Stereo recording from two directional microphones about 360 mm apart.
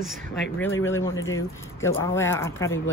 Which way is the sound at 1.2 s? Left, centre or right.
Left.